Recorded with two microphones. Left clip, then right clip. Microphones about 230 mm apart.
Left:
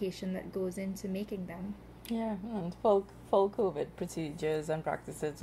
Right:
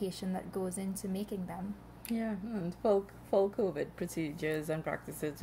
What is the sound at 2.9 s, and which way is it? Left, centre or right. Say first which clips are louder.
Speech: left 1 dB; left.